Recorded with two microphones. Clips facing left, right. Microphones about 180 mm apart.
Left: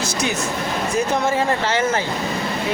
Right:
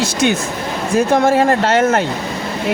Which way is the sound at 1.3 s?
65° right (ahead or behind).